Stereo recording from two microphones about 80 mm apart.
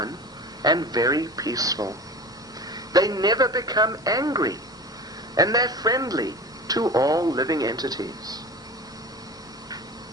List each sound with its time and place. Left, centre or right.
0.6 s speech: right